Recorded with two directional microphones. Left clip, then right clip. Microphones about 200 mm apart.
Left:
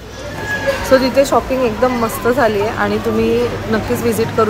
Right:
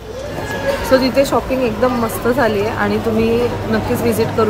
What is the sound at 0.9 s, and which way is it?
A woman's voice, centre (ahead or behind).